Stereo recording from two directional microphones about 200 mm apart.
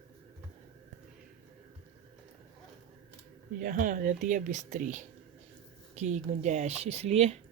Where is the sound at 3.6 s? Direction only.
45° right (ahead or behind).